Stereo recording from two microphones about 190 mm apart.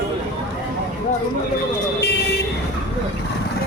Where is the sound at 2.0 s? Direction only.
60° left (ahead or behind).